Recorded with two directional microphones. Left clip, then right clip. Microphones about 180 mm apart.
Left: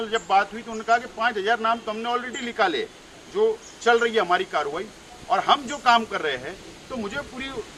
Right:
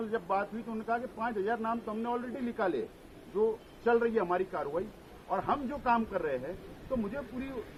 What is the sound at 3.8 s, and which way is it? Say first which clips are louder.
A man's voice: left 9 dB; 30° left (ahead or behind).